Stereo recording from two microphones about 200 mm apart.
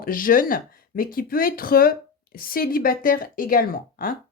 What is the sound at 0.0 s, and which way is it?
Speech, 45° left (ahead or behind).